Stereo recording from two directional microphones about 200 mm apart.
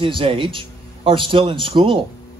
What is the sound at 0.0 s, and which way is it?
A man's voice, 25° right (ahead or behind).